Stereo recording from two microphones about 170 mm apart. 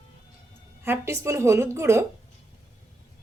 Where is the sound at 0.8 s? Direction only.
15° right (ahead or behind).